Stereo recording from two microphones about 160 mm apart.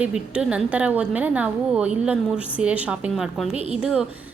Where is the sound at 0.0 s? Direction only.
5° right (ahead or behind).